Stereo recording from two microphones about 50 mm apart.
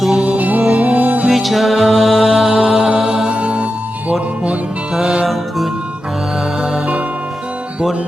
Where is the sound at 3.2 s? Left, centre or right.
Right.